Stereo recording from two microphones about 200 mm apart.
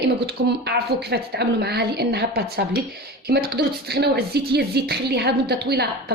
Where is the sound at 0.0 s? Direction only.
55° right (ahead or behind).